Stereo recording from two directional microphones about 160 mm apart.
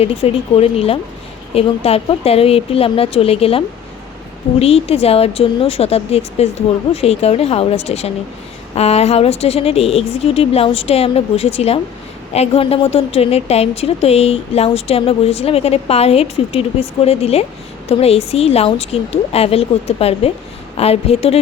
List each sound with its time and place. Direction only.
0.0 s speech: 40° left (ahead or behind)
4.6 s speech: 40° left (ahead or behind)